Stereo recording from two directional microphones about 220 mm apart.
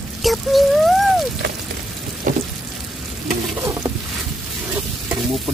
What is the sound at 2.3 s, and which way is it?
Frying, 35° right (ahead or behind).